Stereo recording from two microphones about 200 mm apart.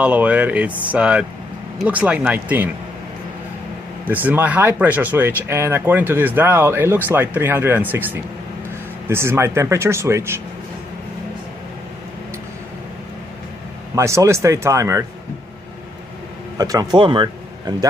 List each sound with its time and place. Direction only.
0.0 s speech: 5° right (ahead or behind)
4.0 s speech: 10° right (ahead or behind)
13.9 s speech: 15° right (ahead or behind)
16.6 s speech: 15° right (ahead or behind)